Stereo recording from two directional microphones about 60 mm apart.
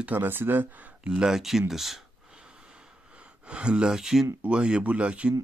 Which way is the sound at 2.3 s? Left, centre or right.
Centre.